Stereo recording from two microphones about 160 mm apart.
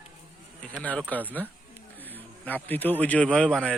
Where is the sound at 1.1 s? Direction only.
10° left (ahead or behind).